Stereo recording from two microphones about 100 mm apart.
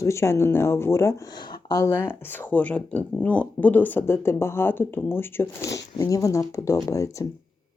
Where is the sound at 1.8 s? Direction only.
25° left (ahead or behind).